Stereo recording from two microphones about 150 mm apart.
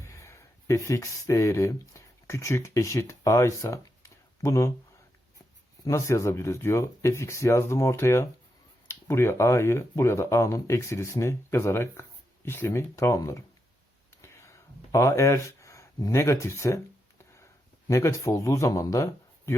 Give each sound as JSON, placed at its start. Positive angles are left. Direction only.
{"t": 0.0, "sound": "speech", "side_deg": 20}
{"t": 5.8, "sound": "speech", "side_deg": 20}
{"t": 14.2, "sound": "a sound", "side_deg": 20}
{"t": 14.9, "sound": "speech", "side_deg": 20}
{"t": 17.8, "sound": "speech", "side_deg": 20}